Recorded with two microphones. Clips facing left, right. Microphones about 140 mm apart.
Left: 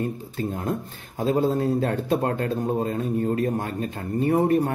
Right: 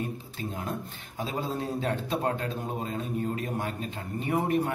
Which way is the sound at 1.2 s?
50° left (ahead or behind).